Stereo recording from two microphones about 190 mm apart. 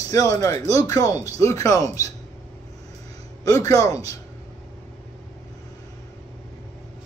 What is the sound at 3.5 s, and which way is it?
Speech, 15° left (ahead or behind).